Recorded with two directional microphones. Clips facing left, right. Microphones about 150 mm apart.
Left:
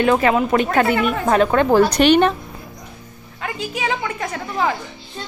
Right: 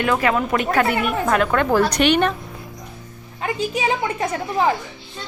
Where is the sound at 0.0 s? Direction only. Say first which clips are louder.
Left 4 dB; 30° left (ahead or behind).